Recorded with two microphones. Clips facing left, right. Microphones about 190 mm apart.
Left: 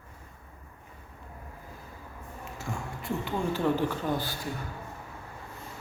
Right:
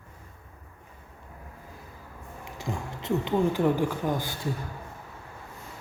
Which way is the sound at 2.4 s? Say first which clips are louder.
Right 3 dB; 15° right (ahead or behind).